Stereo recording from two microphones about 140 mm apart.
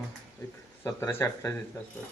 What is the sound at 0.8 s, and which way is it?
Speech, 20° left (ahead or behind).